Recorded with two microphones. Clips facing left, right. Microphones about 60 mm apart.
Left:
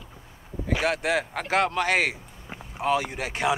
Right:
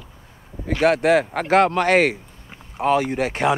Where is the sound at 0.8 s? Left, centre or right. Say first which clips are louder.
Right 10 dB; right.